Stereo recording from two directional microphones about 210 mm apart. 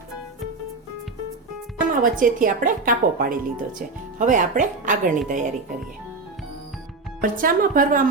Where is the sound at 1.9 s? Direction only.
40° right (ahead or behind).